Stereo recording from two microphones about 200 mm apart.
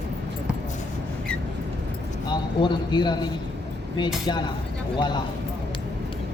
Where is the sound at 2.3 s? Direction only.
20° left (ahead or behind).